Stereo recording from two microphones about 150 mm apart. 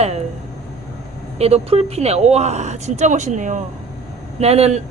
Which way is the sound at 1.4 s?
45° right (ahead or behind).